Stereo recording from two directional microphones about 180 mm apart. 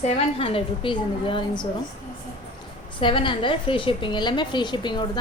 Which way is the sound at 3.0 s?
30° left (ahead or behind).